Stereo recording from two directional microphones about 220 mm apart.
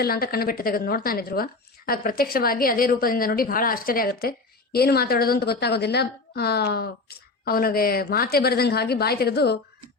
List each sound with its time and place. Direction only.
0.0 s a woman's voice: 45° left (ahead or behind)